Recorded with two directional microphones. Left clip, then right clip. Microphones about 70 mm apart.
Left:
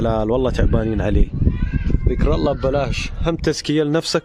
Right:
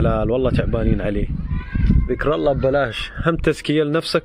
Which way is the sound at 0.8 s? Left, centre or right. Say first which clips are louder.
Left 1 dB; left.